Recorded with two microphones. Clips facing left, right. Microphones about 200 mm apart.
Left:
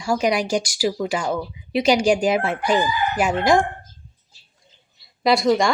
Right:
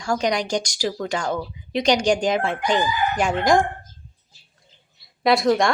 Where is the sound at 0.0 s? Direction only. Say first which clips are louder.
Left 2 dB; 5° left (ahead or behind).